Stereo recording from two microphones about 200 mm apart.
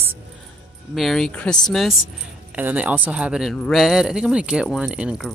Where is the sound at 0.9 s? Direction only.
Centre (ahead or behind).